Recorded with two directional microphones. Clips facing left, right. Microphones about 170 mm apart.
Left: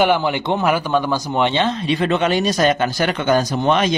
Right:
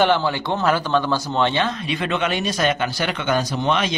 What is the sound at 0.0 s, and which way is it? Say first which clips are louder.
Speech: left 2 dB; 15° left (ahead or behind).